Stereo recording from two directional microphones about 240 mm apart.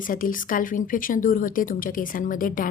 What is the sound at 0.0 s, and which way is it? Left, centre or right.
Speech, left.